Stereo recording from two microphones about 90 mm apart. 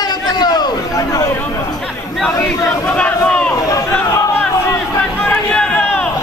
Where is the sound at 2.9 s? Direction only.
15° left (ahead or behind).